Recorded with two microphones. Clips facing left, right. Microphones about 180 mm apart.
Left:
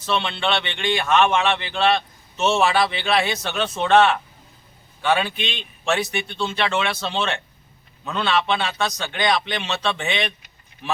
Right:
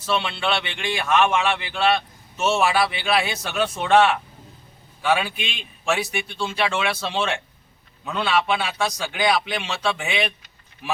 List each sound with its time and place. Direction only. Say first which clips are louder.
0.0 s speech: left 1 dB; 5° right (ahead or behind)